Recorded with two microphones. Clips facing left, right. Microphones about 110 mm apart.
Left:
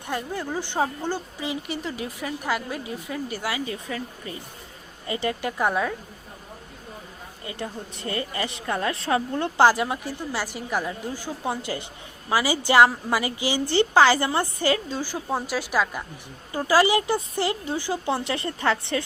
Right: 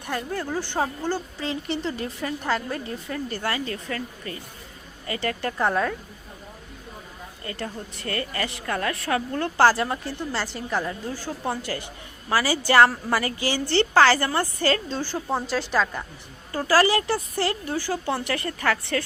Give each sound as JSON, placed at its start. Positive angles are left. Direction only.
{"t": 0.1, "sound": "a woman's voice", "side_deg": 15}
{"t": 7.4, "sound": "a woman's voice", "side_deg": 15}